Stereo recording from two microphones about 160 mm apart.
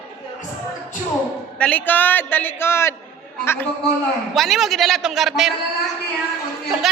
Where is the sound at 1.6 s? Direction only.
10° left (ahead or behind).